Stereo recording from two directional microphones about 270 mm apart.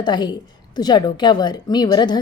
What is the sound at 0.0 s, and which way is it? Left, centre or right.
A woman's voice, centre.